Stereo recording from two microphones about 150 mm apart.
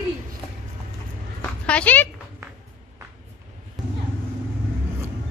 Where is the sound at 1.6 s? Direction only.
10° left (ahead or behind).